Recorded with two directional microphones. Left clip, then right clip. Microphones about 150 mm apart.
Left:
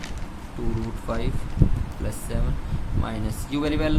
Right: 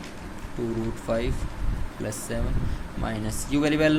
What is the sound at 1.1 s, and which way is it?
Speech, 10° right (ahead or behind).